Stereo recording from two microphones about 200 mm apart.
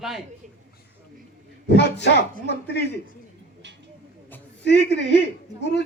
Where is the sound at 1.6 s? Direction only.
55° left (ahead or behind).